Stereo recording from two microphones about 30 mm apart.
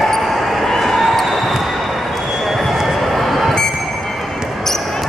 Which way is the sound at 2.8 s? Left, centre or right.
Centre.